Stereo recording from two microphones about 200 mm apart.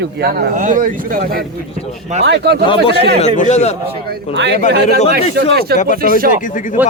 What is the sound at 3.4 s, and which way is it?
Speech, 35° left (ahead or behind).